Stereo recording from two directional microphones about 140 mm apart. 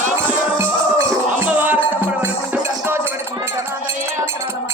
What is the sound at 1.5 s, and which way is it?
Music, 10° right (ahead or behind).